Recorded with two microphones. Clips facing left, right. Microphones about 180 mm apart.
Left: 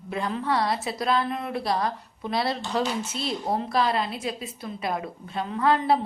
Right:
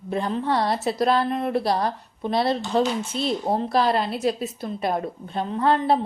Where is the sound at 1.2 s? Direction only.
45° right (ahead or behind).